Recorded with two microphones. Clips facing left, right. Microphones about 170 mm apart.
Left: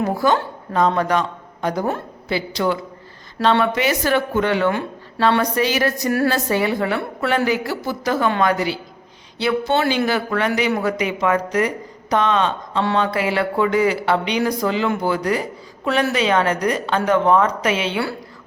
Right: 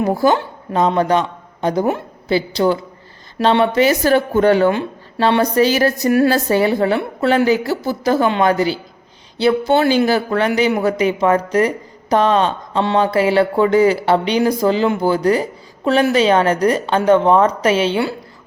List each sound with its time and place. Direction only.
0.2 s a woman's voice: 30° right (ahead or behind)
4.7 s speech: 20° right (ahead or behind)
5.4 s a woman's voice: 30° right (ahead or behind)